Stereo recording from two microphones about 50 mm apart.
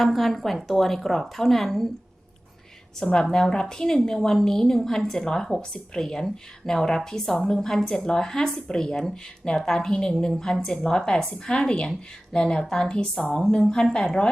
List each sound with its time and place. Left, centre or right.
0.0 s a woman's voice: centre
3.0 s speech: centre